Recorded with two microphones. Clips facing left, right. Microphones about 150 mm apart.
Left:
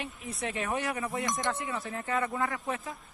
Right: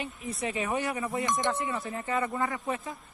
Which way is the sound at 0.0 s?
Centre (ahead or behind).